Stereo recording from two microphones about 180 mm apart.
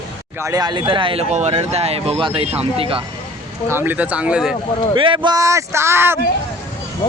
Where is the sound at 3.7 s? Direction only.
10° right (ahead or behind).